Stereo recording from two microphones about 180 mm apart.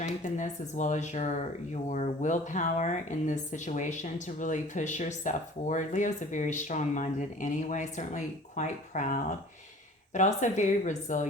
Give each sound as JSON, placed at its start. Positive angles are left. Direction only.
{"t": 0.0, "sound": "speech", "side_deg": 40}